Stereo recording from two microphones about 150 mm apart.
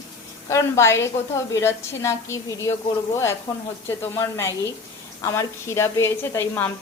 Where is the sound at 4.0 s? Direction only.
20° left (ahead or behind).